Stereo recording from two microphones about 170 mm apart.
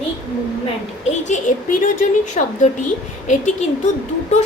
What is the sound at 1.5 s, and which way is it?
A child's voice, 45° left (ahead or behind).